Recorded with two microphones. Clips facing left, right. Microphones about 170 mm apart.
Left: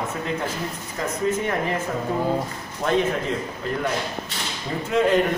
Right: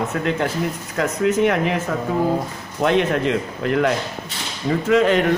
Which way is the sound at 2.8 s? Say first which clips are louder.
Right 4 dB; 75° right (ahead or behind).